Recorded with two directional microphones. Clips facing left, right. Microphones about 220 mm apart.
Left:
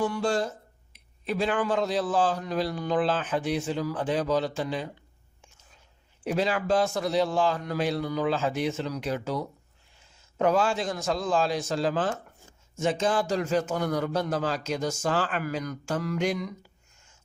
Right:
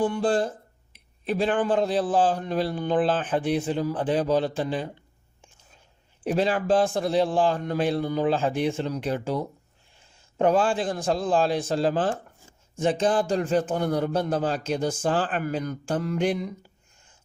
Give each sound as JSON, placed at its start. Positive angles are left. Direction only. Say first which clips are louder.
{"t": 0.0, "sound": "speech", "louder": "right 3 dB", "side_deg": -30}
{"t": 6.2, "sound": "speech", "louder": "right 3 dB", "side_deg": -30}
{"t": 10.3, "sound": "a man's voice", "louder": "right 3 dB", "side_deg": -30}